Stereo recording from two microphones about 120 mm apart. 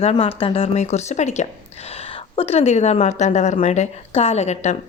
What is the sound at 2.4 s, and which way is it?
A woman's voice, 60° left (ahead or behind).